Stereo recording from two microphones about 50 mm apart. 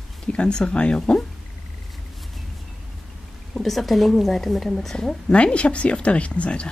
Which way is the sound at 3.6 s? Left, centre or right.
Centre.